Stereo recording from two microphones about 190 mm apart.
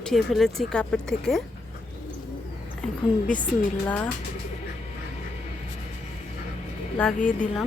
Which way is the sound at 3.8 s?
10° left (ahead or behind).